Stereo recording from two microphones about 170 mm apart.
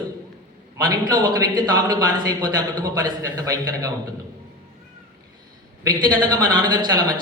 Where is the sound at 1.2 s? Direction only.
25° right (ahead or behind).